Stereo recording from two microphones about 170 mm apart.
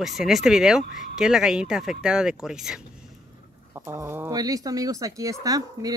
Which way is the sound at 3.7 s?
15° right (ahead or behind).